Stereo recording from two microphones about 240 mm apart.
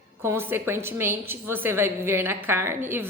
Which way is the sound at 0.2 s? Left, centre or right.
Centre.